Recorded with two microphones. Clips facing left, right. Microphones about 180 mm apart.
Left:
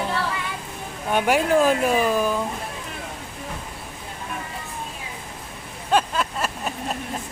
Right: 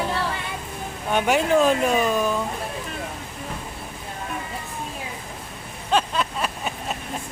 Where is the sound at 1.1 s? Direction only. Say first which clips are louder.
Even; 5° left (ahead or behind).